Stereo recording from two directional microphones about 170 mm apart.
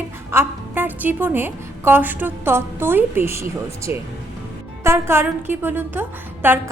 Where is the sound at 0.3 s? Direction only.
10° right (ahead or behind).